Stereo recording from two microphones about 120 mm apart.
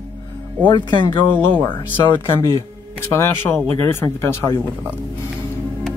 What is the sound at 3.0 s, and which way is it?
Speech, 20° left (ahead or behind).